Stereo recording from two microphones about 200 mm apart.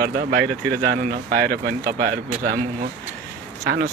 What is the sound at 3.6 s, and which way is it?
Speech, 50° right (ahead or behind).